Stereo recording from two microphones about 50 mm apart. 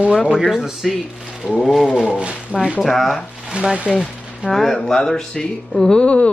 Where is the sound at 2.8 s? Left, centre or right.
Centre.